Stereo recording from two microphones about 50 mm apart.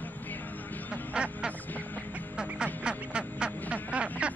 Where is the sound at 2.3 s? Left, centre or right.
Centre.